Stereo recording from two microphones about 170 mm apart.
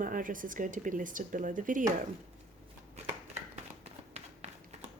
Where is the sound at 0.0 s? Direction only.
50° right (ahead or behind).